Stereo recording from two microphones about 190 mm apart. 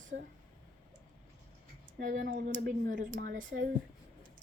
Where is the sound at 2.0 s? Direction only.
50° right (ahead or behind).